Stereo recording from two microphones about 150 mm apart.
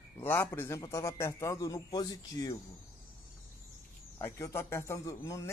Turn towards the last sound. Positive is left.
turn(degrees=20)  # may be behind; listen again after turning